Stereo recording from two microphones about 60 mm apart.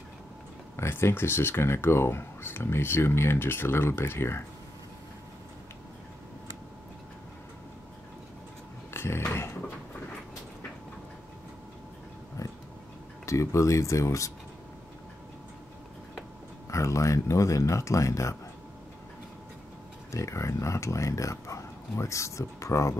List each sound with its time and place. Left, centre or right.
0.7 s speech: left
8.9 s a sound: left
13.2 s speech: left
16.7 s speech: left
20.1 s speech: left